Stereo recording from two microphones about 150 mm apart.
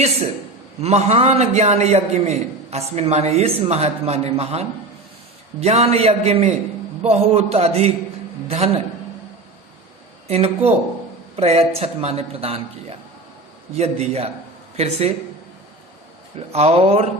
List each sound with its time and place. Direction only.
0.8 s a man's voice: 45° right (ahead or behind)
10.2 s a man's voice: 40° right (ahead or behind)
13.7 s a man's voice: 45° right (ahead or behind)
16.5 s a man's voice: 45° right (ahead or behind)